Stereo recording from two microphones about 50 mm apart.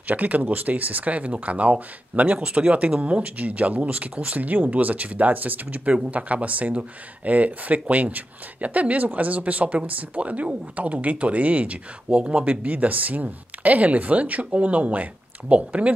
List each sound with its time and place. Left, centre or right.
0.1 s speech: right